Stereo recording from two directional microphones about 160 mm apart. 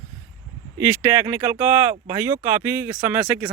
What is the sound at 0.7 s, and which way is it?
Speech, 10° right (ahead or behind).